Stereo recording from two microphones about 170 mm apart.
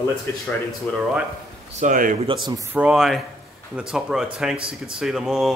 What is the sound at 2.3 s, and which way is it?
Speech, 25° right (ahead or behind).